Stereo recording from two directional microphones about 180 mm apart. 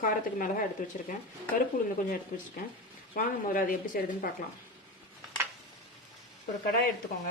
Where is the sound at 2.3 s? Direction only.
50° left (ahead or behind).